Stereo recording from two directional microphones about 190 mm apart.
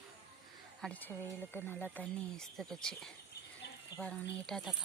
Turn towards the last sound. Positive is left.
turn(degrees=0)  # may be behind; listen again after turning